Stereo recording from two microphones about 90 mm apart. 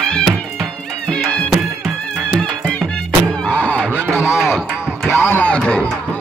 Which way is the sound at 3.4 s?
20° left (ahead or behind).